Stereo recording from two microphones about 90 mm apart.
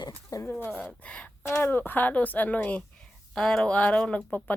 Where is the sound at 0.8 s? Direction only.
15° left (ahead or behind).